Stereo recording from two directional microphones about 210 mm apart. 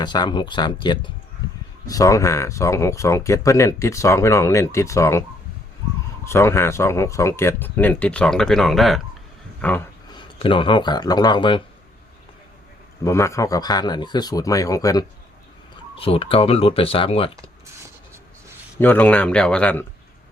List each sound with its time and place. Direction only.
0.0 s speech: 20° left (ahead or behind)
6.2 s speech: 10° left (ahead or behind)
10.1 s speech: 20° left (ahead or behind)
13.1 s speech: 15° left (ahead or behind)
16.0 s speech: 25° left (ahead or behind)
18.8 s speech: 10° left (ahead or behind)